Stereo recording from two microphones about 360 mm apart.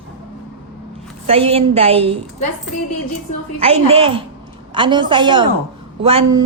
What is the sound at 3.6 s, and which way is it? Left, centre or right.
Speech, centre.